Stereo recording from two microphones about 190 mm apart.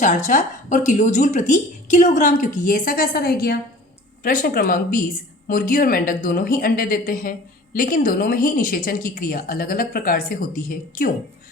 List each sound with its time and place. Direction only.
0.0 s a woman's voice: 40° left (ahead or behind)